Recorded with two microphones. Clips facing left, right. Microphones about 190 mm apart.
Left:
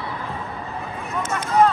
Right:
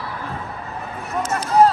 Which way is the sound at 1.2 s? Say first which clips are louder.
Right 3 dB; 35° right (ahead or behind).